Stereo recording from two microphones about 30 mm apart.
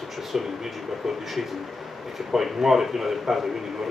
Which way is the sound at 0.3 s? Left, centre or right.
Centre.